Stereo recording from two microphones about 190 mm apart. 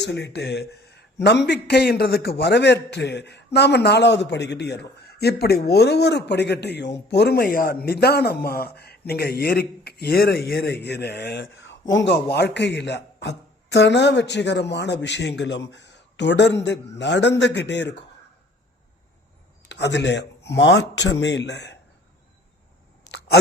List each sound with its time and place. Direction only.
0.0 s a man's voice: 65° left (ahead or behind)
19.6 s a man's voice: 65° left (ahead or behind)